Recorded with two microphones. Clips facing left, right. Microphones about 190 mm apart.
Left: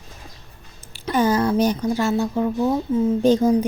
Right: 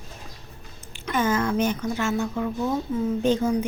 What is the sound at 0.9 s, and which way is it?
A woman's voice, 35° left (ahead or behind).